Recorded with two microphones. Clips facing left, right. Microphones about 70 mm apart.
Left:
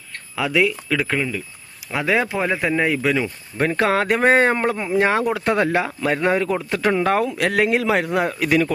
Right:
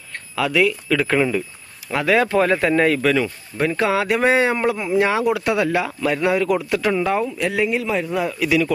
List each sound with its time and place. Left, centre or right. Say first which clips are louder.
0.3 s speech: right 1 dB; left
2.3 s speech: right 4 dB; centre
3.6 s a man's voice: left 1 dB; left
7.2 s speech: left 2 dB; left